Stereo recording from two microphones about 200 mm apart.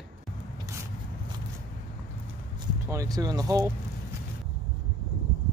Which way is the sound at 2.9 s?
20° right (ahead or behind).